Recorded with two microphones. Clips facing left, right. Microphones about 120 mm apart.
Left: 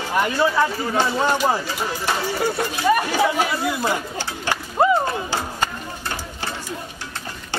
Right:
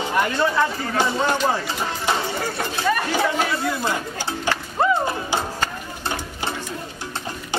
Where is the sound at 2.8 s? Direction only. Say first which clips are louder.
Left 3 dB; 15° left (ahead or behind).